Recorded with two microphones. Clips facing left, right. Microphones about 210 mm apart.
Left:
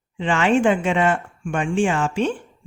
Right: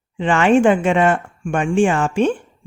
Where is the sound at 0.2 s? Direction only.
50° right (ahead or behind).